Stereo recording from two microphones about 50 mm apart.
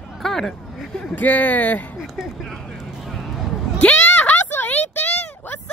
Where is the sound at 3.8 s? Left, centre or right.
Left.